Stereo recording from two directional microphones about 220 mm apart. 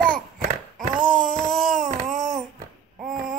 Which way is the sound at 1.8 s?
35° right (ahead or behind).